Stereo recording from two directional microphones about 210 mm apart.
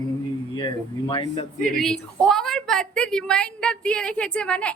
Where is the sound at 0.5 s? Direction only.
25° left (ahead or behind).